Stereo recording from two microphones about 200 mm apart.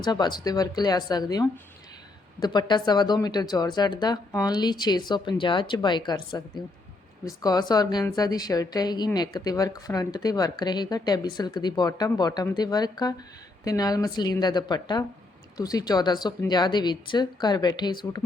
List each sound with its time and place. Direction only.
0.0 s speech: 20° left (ahead or behind)
7.4 s speech: 20° left (ahead or behind)